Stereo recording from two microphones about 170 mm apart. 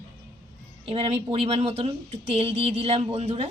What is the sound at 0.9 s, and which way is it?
Speech, 35° right (ahead or behind).